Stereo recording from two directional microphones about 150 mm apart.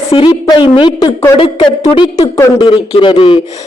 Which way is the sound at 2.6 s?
30° left (ahead or behind).